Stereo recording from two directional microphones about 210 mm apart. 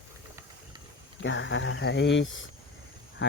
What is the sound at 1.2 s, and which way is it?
Speech, 60° left (ahead or behind).